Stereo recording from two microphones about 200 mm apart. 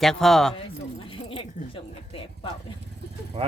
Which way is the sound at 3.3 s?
30° right (ahead or behind).